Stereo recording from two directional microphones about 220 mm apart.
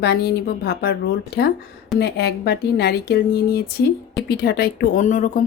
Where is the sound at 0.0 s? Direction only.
45° left (ahead or behind).